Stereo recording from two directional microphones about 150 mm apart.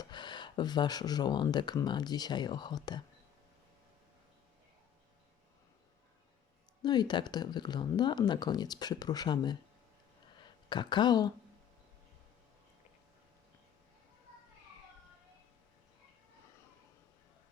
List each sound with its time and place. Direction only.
0.0 s speech: 30° left (ahead or behind)
6.8 s speech: 30° left (ahead or behind)